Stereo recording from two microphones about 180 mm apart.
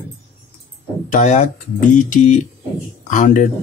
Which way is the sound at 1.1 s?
45° left (ahead or behind).